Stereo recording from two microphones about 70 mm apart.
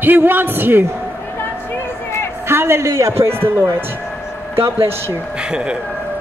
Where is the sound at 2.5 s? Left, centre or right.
Right.